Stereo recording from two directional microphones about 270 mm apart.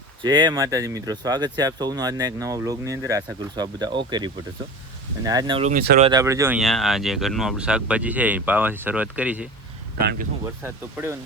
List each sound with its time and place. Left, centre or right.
0.2 s speech: centre
10.0 s speech: right
10.4 s speech: centre